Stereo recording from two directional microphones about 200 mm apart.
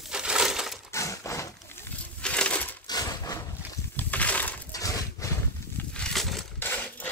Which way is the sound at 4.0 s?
10° left (ahead or behind).